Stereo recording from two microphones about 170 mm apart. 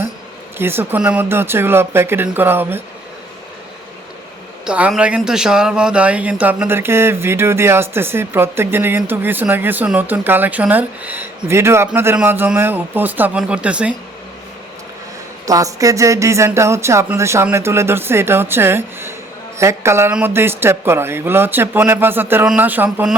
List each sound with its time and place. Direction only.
0.6 s speech: 15° right (ahead or behind)
4.6 s speech: 5° right (ahead or behind)
15.4 s speech: 20° right (ahead or behind)